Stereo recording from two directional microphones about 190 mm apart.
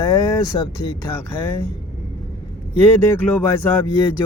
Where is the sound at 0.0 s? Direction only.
20° left (ahead or behind).